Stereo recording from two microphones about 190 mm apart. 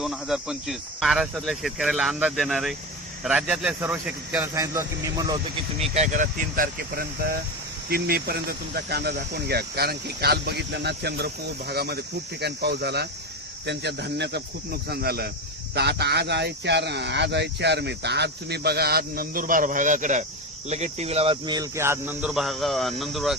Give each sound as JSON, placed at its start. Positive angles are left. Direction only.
{"t": 0.0, "sound": "speech", "side_deg": 0}
{"t": 5.9, "sound": "speech", "side_deg": -40}